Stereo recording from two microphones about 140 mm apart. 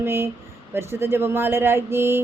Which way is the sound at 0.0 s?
15° right (ahead or behind).